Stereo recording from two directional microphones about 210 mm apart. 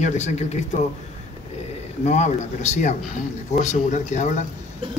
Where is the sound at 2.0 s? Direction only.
35° left (ahead or behind).